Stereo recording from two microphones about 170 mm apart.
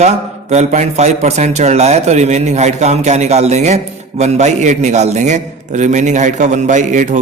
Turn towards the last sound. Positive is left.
turn(degrees=-45)  # may be behind; listen again after turning